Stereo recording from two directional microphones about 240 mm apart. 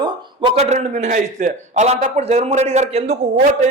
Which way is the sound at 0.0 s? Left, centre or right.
Right.